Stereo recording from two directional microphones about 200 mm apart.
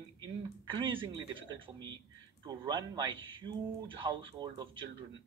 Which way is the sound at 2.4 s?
20° right (ahead or behind).